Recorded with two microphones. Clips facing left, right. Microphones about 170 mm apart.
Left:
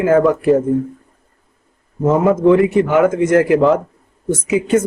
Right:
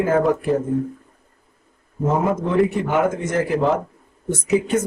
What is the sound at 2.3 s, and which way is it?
Speech, 90° left.